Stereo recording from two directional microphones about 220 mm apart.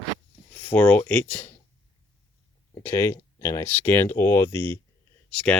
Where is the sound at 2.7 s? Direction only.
15° left (ahead or behind).